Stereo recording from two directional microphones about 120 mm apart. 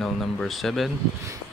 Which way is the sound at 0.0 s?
Centre (ahead or behind).